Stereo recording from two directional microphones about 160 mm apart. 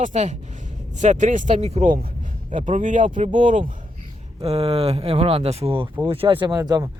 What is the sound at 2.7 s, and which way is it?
Speech, 55° right (ahead or behind).